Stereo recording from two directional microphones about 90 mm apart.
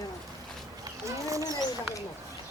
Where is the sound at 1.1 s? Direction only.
35° right (ahead or behind).